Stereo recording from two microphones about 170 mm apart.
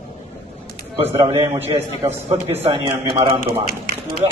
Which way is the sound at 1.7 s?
15° right (ahead or behind).